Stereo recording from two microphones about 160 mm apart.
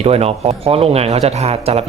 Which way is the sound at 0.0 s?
40° right (ahead or behind).